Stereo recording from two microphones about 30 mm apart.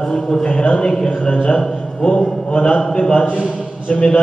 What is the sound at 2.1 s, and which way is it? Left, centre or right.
A man's voice, left.